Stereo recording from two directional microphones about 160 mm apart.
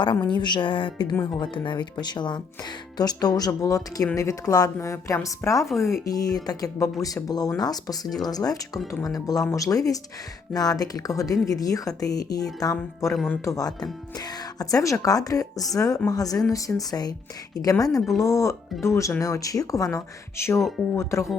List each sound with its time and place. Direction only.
0.0 s speech: 30° left (ahead or behind)